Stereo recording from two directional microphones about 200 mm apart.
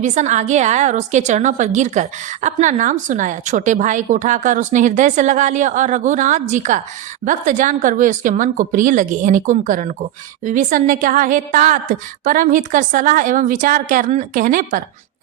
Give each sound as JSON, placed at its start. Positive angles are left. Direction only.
{"t": 0.0, "sound": "a woman's voice", "side_deg": -35}